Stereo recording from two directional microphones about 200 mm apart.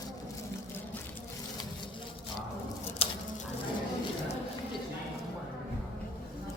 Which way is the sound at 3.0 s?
30° left (ahead or behind).